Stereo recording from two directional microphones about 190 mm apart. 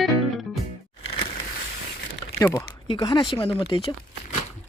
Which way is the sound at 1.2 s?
55° left (ahead or behind).